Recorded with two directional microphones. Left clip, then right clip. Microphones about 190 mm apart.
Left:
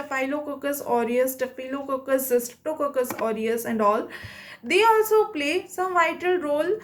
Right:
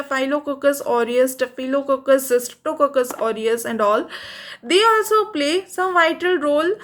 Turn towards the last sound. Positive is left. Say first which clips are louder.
# right 5 dB
turn(degrees=-25)  # may be behind; listen again after turning